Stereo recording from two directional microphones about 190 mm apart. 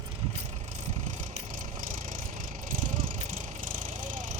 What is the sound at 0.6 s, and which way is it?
Vehicle, 40° right (ahead or behind).